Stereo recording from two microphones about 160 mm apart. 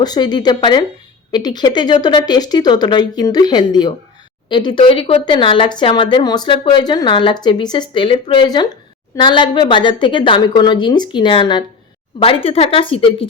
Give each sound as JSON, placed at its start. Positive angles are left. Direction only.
{"t": 0.0, "sound": "a woman's voice", "side_deg": 25}